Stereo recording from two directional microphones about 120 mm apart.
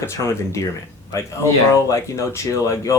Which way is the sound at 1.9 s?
25° left (ahead or behind).